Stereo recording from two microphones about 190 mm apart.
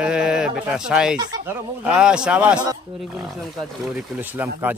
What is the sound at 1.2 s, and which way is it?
Speech, 20° right (ahead or behind).